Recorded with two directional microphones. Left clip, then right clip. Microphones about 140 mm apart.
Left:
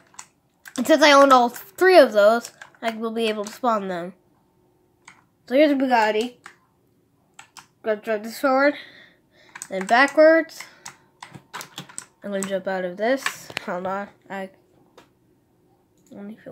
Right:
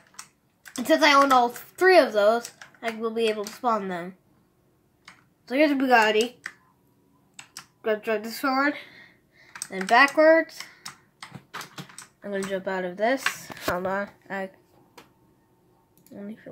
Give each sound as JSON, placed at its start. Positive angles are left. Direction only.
{"t": 0.7, "sound": "speech", "side_deg": 30}
{"t": 5.4, "sound": "a woman's voice", "side_deg": 15}
{"t": 5.8, "sound": "speech", "side_deg": 0}
{"t": 7.8, "sound": "speech", "side_deg": 5}
{"t": 12.2, "sound": "speech", "side_deg": 15}
{"t": 13.8, "sound": "speech", "side_deg": -5}
{"t": 16.1, "sound": "speech", "side_deg": 5}